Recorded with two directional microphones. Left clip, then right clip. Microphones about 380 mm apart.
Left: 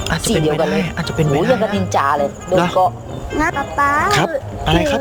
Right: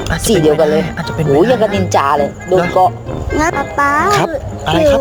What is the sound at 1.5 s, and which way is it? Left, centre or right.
Speech, right.